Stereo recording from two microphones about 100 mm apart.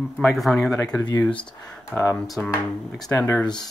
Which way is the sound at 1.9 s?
25° left (ahead or behind).